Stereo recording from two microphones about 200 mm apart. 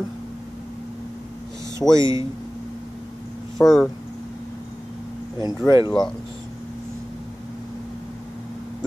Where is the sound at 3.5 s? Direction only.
Centre (ahead or behind).